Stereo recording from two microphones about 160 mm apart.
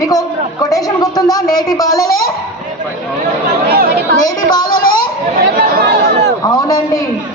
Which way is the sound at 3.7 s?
70° right (ahead or behind).